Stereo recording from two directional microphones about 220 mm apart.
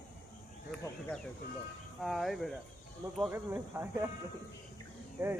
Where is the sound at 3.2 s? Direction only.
10° right (ahead or behind).